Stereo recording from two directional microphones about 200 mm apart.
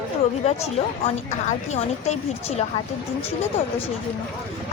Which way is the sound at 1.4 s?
35° left (ahead or behind).